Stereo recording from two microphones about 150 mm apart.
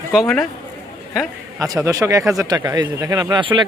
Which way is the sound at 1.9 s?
20° right (ahead or behind).